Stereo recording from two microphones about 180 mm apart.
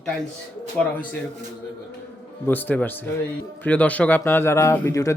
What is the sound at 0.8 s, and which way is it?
Speech, 5° left (ahead or behind).